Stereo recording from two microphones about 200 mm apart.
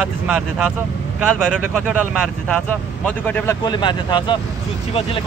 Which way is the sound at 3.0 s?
10° left (ahead or behind).